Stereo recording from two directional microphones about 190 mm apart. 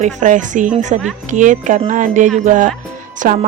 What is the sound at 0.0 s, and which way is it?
A woman's voice, 40° right (ahead or behind).